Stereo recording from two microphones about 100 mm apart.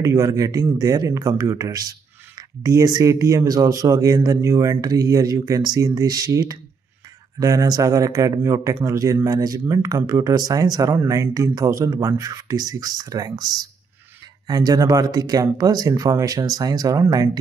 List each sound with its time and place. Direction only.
0.0 s speech: 30° right (ahead or behind)